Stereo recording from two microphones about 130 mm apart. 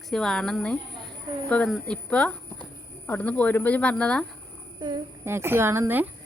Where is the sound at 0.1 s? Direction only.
5° left (ahead or behind).